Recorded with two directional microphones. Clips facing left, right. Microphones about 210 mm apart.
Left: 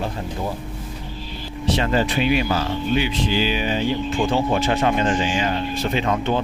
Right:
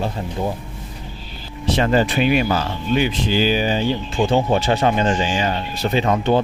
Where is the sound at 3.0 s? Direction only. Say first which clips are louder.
Right 3 dB; 40° right (ahead or behind).